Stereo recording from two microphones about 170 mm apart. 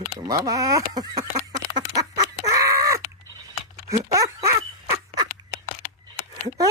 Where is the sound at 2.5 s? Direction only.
20° right (ahead or behind).